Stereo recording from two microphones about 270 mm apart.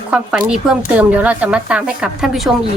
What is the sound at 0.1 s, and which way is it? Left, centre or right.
Speech, centre.